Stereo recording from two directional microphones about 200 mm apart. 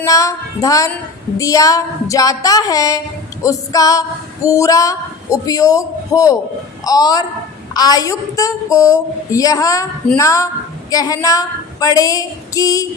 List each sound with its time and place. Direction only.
0.0 s a woman's voice: 15° left (ahead or behind)